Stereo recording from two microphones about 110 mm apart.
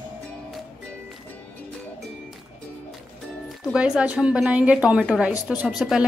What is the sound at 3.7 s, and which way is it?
Speech, 10° right (ahead or behind).